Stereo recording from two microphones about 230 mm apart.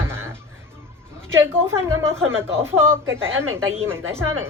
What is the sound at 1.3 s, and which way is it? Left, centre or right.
Speech, centre.